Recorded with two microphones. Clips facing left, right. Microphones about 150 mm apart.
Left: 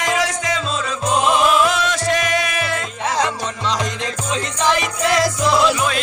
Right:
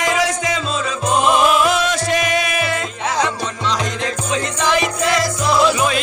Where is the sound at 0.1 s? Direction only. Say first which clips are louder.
Right 2 dB; 5° right (ahead or behind).